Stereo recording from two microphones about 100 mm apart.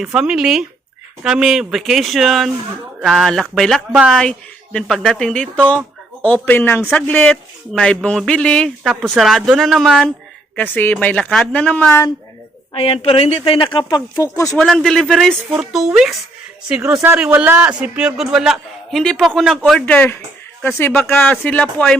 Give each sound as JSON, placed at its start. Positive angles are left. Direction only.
{"t": 0.0, "sound": "speech", "side_deg": -5}
{"t": 8.9, "sound": "speech", "side_deg": 0}
{"t": 10.5, "sound": "speech", "side_deg": 15}
{"t": 11.9, "sound": "speech", "side_deg": 30}
{"t": 12.7, "sound": "a woman's voice", "side_deg": 70}
{"t": 13.7, "sound": "speech", "side_deg": 40}
{"t": 14.5, "sound": "speech", "side_deg": 5}
{"t": 17.3, "sound": "a man's voice", "side_deg": -20}
{"t": 19.8, "sound": "speech", "side_deg": 20}
{"t": 21.2, "sound": "speech", "side_deg": 15}